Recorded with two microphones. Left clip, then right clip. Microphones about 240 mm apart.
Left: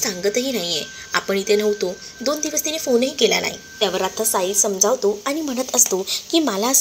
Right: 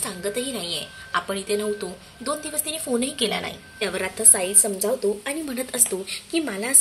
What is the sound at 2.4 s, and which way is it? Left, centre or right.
Speech, right.